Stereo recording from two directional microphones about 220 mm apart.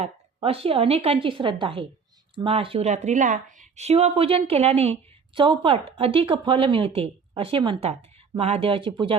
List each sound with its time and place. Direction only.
0.0 s speech: 25° right (ahead or behind)